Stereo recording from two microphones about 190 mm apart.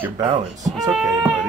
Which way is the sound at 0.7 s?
Centre (ahead or behind).